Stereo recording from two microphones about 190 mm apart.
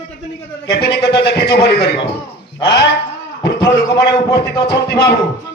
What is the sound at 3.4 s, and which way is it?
Speech, 60° left (ahead or behind).